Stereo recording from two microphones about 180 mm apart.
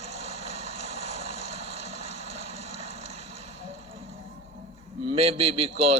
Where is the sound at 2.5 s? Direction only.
35° right (ahead or behind).